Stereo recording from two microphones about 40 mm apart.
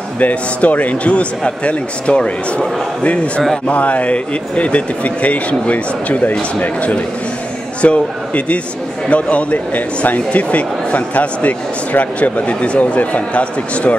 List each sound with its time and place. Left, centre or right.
0.2 s speech: left